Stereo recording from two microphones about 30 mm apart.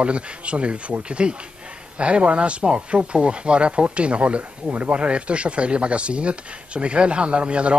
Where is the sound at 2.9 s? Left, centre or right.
Right.